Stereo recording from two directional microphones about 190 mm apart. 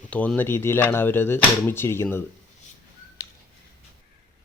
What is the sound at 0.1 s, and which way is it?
Speech, 5° left (ahead or behind).